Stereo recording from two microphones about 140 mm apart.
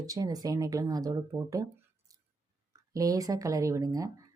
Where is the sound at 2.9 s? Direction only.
25° right (ahead or behind).